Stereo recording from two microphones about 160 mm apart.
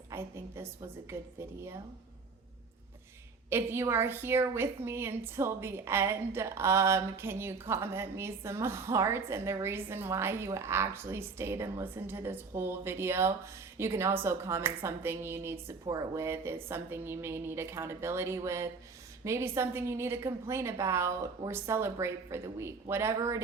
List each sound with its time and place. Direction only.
0.1 s a woman's voice: 15° right (ahead or behind)
3.5 s a woman's voice: 15° right (ahead or behind)